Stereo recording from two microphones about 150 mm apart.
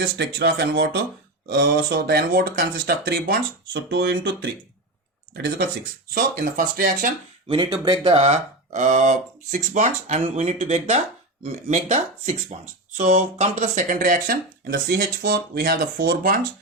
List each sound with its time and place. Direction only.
0.0 s speech: 90° right
5.3 s speech: 90° right
6.1 s speech: 70° right (ahead or behind)
7.4 s speech: 30° right (ahead or behind); by 16.5 s 65° right (ahead or behind)